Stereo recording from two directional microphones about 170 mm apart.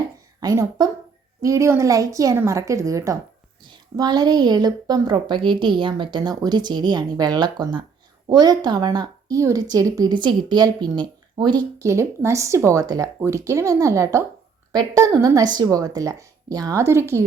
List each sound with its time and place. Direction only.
0.3 s a woman's voice: 20° right (ahead or behind)